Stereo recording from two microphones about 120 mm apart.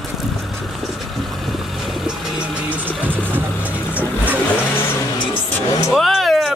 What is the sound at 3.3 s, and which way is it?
Vehicle, 15° right (ahead or behind).